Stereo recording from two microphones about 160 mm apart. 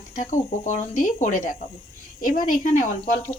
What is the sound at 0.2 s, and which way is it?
Speech, 50° left (ahead or behind).